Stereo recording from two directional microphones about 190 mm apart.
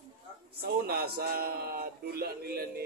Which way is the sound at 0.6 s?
55° right (ahead or behind).